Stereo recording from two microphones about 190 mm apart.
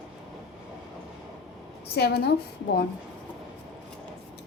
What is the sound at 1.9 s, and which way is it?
Speech, 60° left (ahead or behind).